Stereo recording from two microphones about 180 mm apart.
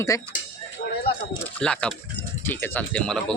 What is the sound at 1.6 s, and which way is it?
A man's voice, 5° left (ahead or behind).